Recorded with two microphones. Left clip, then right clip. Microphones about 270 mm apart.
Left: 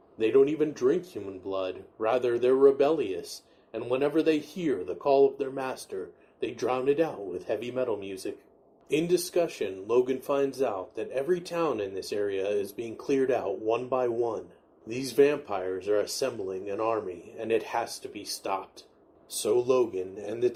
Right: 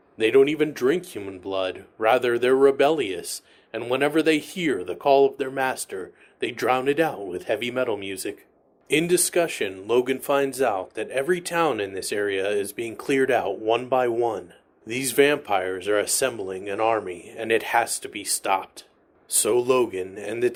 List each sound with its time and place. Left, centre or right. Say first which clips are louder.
0.2 s speech: right 5 dB; right